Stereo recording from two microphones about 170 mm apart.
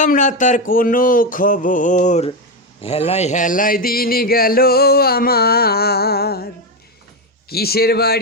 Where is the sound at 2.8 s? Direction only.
35° left (ahead or behind); by 6.5 s 65° left (ahead or behind).